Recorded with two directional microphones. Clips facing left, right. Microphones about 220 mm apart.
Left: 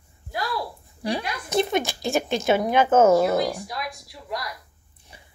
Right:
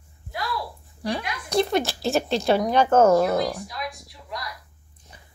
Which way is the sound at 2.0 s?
15° left (ahead or behind).